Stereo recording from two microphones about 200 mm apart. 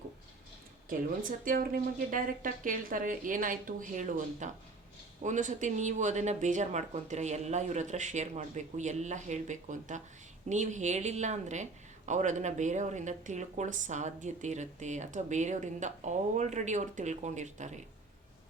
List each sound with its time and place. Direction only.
0.9 s speech: 45° right (ahead or behind)